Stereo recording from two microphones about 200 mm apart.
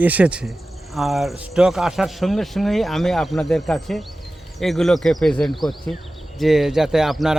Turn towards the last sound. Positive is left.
turn(degrees=0)  # may be behind; listen again after turning